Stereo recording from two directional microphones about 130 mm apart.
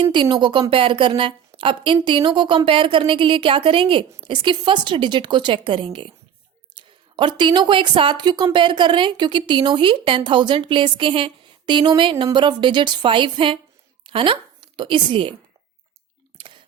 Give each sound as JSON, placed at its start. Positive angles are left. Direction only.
{"t": 0.0, "sound": "a woman's voice", "side_deg": -35}